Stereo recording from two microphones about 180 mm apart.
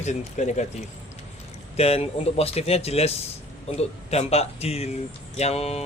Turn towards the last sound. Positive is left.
turn(degrees=35)  # may be behind; listen again after turning